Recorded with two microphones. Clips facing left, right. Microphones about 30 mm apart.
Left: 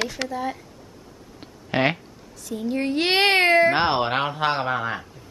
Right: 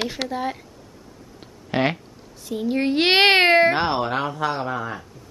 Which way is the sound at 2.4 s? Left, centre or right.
Right.